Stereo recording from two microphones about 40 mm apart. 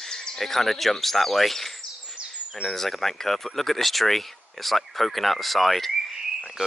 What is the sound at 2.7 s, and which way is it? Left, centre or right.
Speech, centre.